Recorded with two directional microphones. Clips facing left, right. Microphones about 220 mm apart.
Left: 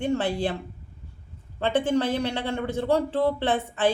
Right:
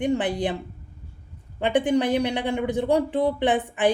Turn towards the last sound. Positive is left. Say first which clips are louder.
# right 2 dB
turn(degrees=-15)  # may be behind; listen again after turning